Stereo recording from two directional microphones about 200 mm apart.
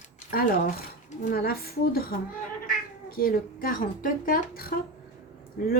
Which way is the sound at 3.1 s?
45° left (ahead or behind).